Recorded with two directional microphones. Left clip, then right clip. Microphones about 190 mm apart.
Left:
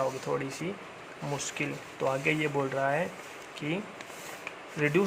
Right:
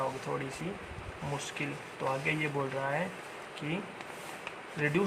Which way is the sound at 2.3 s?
40° left (ahead or behind).